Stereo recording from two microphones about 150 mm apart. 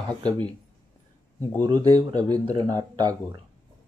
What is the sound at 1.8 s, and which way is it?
Speech, 25° right (ahead or behind).